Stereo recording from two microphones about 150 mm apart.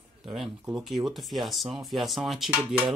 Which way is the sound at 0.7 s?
5° right (ahead or behind).